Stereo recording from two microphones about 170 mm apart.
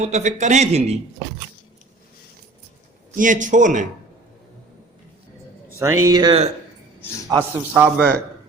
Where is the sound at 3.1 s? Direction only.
50° right (ahead or behind).